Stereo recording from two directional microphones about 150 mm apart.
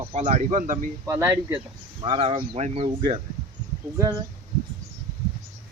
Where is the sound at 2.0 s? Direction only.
35° right (ahead or behind).